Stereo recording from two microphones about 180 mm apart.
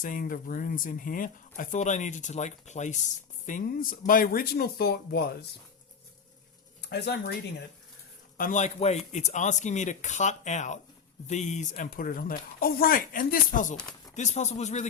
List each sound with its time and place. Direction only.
0.0 s speech: 50° left (ahead or behind)
6.8 s speech: 70° left (ahead or behind)
8.4 s speech: 45° left (ahead or behind)